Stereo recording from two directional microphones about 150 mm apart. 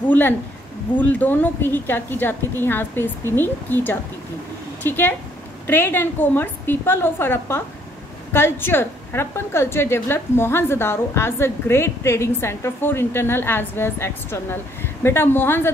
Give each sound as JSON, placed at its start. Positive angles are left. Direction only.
{"t": 0.1, "sound": "a woman's voice", "side_deg": 10}